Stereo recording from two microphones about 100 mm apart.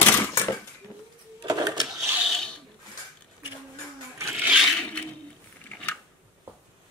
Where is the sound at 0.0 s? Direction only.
20° left (ahead or behind).